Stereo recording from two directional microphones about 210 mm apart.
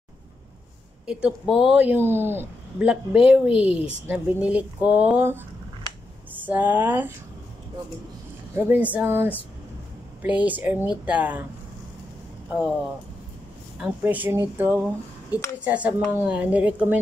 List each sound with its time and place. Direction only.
1.0 s a woman's voice: 5° right (ahead or behind)
8.5 s a woman's voice: 10° right (ahead or behind)
13.7 s a woman's voice: 5° right (ahead or behind)